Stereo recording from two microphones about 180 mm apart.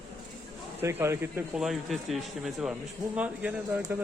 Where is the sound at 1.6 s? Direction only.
Centre (ahead or behind).